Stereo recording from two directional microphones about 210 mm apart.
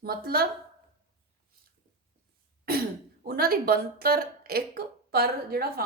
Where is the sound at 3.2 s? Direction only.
45° right (ahead or behind).